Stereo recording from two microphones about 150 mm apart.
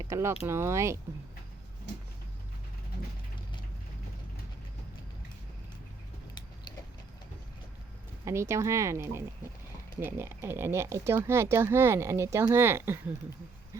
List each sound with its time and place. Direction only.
0.0 s speech: 20° right (ahead or behind)
8.2 s speech: 20° right (ahead or behind)